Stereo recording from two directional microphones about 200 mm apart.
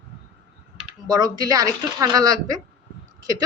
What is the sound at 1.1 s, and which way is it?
Speech, 20° right (ahead or behind).